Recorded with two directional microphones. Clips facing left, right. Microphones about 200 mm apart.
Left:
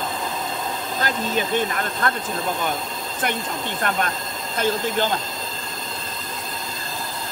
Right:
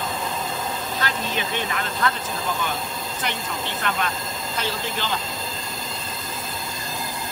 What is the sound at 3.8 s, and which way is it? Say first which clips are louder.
Speech: left 3 dB; 50° left (ahead or behind).